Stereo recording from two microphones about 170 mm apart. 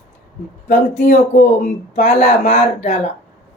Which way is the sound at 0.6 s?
45° left (ahead or behind).